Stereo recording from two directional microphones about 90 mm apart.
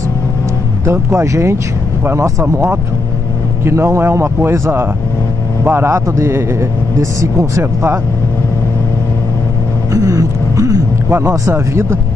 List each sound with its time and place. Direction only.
0.8 s speech: 30° right (ahead or behind)
9.9 s a sound: 40° right (ahead or behind)
11.1 s speech: 30° right (ahead or behind)